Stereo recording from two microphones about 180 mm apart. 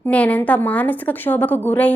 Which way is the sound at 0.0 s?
5° left (ahead or behind).